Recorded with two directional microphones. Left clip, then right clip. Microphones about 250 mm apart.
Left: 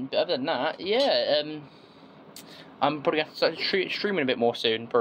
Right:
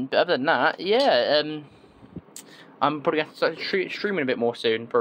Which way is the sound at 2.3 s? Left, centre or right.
Centre.